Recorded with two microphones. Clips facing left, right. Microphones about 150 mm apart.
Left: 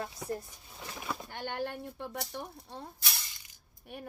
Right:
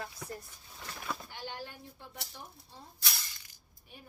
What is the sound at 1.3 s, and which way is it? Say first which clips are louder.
Speech: left 7 dB; 55° left (ahead or behind).